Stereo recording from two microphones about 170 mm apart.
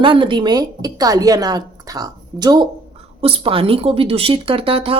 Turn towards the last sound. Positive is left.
turn(degrees=-35)  # may be behind; listen again after turning